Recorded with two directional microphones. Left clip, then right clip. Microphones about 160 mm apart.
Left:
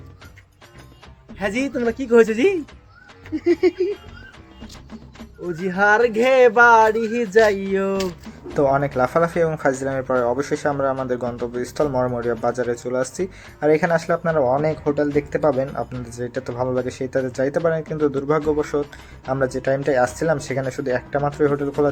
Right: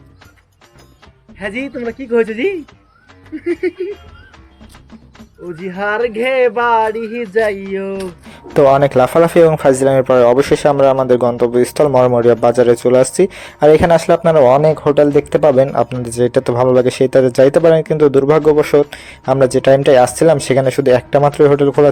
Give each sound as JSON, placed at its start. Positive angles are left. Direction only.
{"t": 1.4, "sound": "speech", "side_deg": -5}
{"t": 3.3, "sound": "a sound", "side_deg": -15}
{"t": 5.5, "sound": "speech", "side_deg": 0}
{"t": 8.5, "sound": "speech", "side_deg": -50}